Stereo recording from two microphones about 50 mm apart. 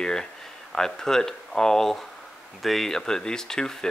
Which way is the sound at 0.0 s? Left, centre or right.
Centre.